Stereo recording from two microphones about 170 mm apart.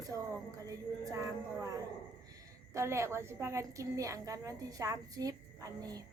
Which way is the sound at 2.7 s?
15° right (ahead or behind).